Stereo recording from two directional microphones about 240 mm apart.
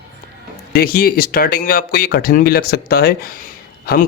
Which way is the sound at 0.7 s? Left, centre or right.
Left.